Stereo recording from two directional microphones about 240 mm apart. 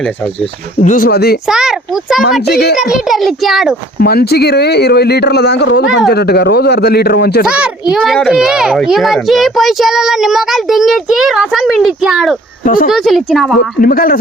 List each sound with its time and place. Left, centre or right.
0.8 s speech: left
1.5 s a child's voice: centre
2.4 s speech: left
2.7 s a child's voice: centre
4.0 s speech: left
7.4 s a child's voice: centre
12.6 s speech: left
12.9 s a child's voice: centre
13.8 s speech: left